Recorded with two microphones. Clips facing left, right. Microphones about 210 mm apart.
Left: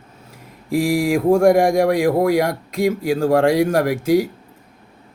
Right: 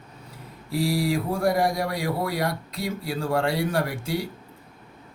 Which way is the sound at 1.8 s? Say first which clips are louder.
Left 12 dB; 90° left.